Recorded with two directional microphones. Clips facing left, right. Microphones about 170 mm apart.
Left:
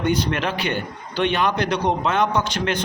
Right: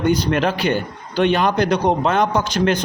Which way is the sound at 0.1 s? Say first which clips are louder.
Right 4 dB; 40° right (ahead or behind).